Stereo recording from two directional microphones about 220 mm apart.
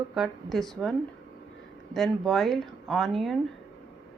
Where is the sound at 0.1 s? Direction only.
Centre (ahead or behind).